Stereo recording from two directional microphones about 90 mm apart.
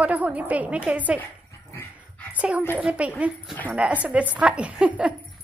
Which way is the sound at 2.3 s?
15° right (ahead or behind).